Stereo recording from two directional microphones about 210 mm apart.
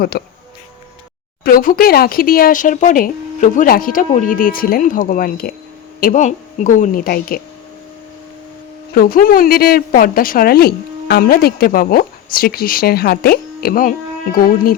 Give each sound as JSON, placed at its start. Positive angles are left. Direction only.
{"t": 0.1, "sound": "a woman's voice", "side_deg": 50}
{"t": 1.5, "sound": "speech", "side_deg": 45}
{"t": 9.0, "sound": "a woman's voice", "side_deg": 45}